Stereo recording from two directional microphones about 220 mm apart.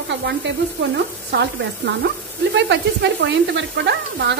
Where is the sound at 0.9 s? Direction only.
50° right (ahead or behind).